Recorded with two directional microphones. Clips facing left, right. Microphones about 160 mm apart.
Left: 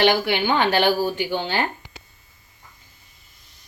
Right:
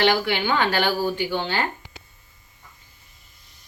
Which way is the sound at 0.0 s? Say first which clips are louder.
Left 2 dB; 20° left (ahead or behind).